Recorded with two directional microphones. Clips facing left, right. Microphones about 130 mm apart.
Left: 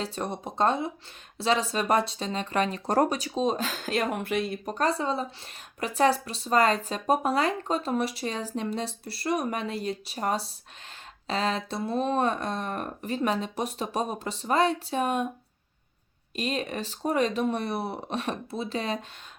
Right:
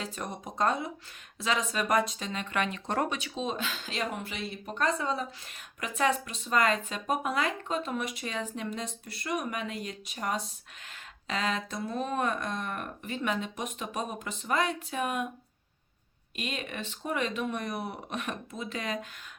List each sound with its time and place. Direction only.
0.0 s speech: 30° left (ahead or behind)
16.3 s speech: 35° left (ahead or behind)